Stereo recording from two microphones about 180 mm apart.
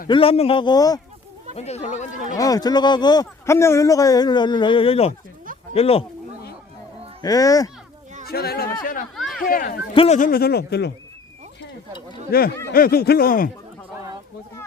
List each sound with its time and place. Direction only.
0.1 s speech: 30° left (ahead or behind)
1.5 s speech: 35° left (ahead or behind)
2.4 s speech: 20° left (ahead or behind)
7.2 s speech: 20° left (ahead or behind)
8.3 s speech: 60° left (ahead or behind)
9.1 s a sound: centre (ahead or behind)
9.4 s speech: 50° left (ahead or behind)
9.9 s speech: 30° left (ahead or behind)
10.2 s speech: 50° left (ahead or behind)
12.3 s speech: 55° left (ahead or behind)